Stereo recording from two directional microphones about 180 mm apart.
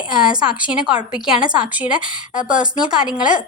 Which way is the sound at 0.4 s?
5° right (ahead or behind).